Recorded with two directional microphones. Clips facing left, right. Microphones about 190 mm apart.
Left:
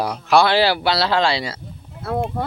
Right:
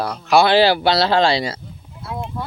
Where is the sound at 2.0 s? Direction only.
55° left (ahead or behind).